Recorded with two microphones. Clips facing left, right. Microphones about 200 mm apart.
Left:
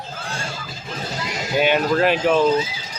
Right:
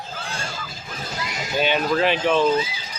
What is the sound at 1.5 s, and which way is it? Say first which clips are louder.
Speech: left 3 dB; 10° left (ahead or behind).